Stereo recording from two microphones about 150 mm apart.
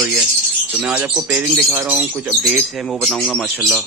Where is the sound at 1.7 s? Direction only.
15° right (ahead or behind).